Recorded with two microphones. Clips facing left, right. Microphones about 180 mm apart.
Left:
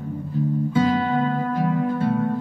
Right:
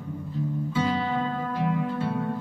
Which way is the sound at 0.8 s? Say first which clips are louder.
Left 6 dB; 45° left (ahead or behind).